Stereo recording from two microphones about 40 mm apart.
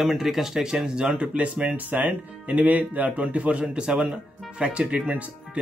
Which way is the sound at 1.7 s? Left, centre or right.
Right.